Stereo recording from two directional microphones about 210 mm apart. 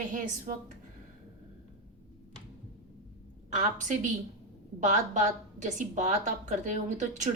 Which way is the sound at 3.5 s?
35° right (ahead or behind).